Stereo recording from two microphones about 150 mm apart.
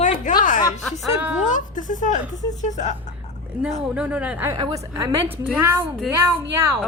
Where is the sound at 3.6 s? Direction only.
5° right (ahead or behind).